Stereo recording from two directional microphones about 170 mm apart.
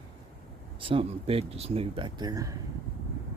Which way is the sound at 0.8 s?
35° right (ahead or behind).